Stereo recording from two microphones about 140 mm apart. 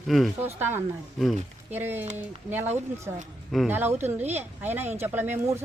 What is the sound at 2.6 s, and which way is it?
Speech, 55° right (ahead or behind).